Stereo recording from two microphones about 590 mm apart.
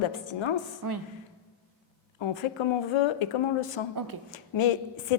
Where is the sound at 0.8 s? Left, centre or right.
Right.